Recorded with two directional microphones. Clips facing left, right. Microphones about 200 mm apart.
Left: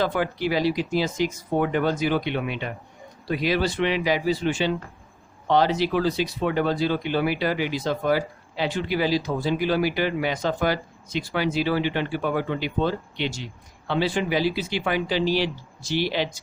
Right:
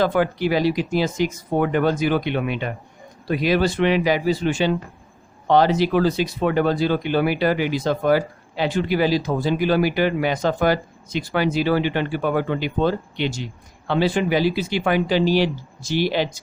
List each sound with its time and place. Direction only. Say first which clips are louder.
0.0 s speech: right 5 dB; 50° right (ahead or behind)